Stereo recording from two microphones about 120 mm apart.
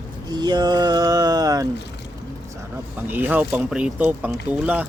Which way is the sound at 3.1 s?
15° right (ahead or behind).